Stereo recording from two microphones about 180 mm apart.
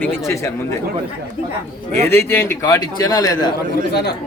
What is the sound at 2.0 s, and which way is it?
A man's voice, 15° left (ahead or behind).